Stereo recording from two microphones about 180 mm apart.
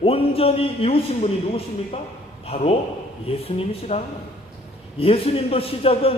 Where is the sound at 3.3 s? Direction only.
30° left (ahead or behind).